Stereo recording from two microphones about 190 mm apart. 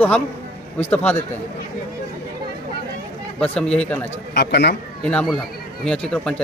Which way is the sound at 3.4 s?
5° left (ahead or behind).